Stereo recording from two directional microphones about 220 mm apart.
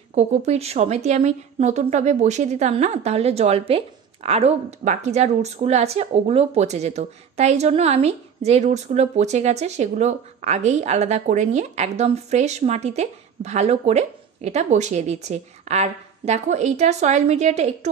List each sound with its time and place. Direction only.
0.1 s a woman's voice: 30° right (ahead or behind)